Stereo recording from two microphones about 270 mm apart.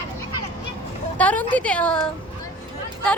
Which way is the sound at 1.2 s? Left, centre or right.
Centre.